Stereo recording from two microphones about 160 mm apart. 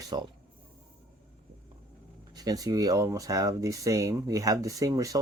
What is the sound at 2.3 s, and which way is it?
Speech, 25° right (ahead or behind).